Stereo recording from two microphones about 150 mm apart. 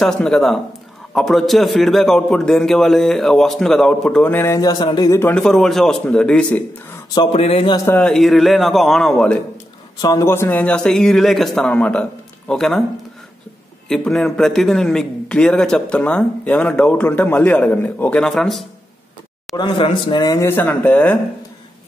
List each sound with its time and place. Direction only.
0.0 s a man's voice: 5° left (ahead or behind); by 5.3 s 20° left (ahead or behind)
5.3 s a man's voice: 5° left (ahead or behind)
7.3 s a man's voice: 40° left (ahead or behind)
7.7 s a man's voice: 20° left (ahead or behind)
8.0 s a man's voice: centre (ahead or behind)
10.0 s a man's voice: 20° left (ahead or behind); by 12.8 s 5° left (ahead or behind)
13.8 s a man's voice: 5° left (ahead or behind)
18.2 s a man's voice: centre (ahead or behind)
19.5 s a man's voice: 30° left (ahead or behind); by 21.2 s 10° left (ahead or behind)